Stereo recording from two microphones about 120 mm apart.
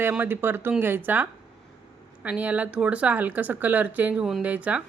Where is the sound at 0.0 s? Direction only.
15° right (ahead or behind).